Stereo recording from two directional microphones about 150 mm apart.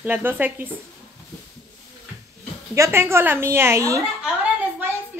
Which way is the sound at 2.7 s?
20° right (ahead or behind).